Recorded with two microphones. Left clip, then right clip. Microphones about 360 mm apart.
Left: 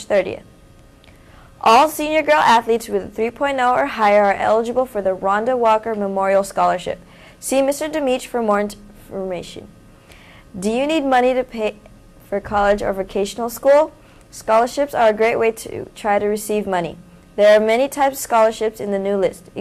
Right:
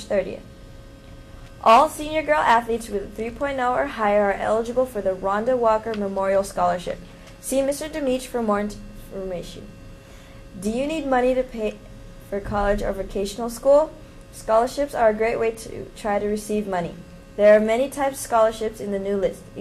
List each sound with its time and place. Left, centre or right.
0.1 s a woman's voice: left
1.6 s a woman's voice: left
10.6 s a woman's voice: left